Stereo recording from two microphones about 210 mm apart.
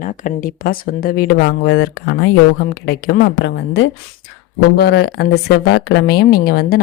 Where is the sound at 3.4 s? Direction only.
60° left (ahead or behind).